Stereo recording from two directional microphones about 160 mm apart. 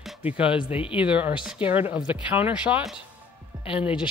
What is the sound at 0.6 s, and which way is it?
Speech, 35° left (ahead or behind).